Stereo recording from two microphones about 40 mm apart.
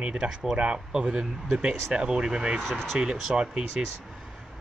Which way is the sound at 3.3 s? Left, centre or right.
Centre.